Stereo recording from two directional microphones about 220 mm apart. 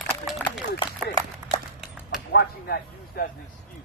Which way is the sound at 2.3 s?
45° left (ahead or behind).